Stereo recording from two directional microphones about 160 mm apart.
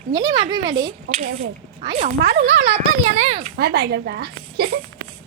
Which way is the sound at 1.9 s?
35° right (ahead or behind).